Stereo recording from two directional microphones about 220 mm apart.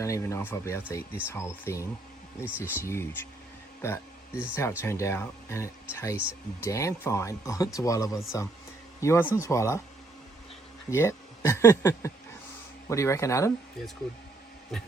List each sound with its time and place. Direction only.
0.0 s speech: 15° left (ahead or behind)
2.4 s speech: 10° right (ahead or behind)
2.8 s speech: 10° left (ahead or behind)
10.9 s speech: 10° left (ahead or behind)